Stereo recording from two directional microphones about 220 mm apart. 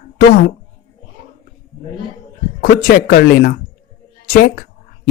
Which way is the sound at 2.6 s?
40° left (ahead or behind).